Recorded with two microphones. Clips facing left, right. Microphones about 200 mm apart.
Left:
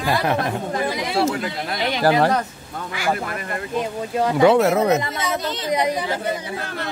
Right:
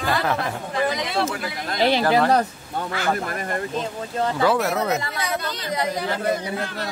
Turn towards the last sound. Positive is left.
turn(degrees=20)  # may be behind; listen again after turning